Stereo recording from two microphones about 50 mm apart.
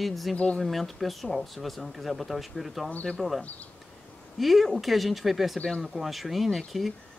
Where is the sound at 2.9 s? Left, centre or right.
Left.